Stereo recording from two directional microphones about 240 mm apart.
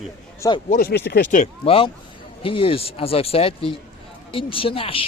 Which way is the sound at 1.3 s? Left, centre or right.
Left.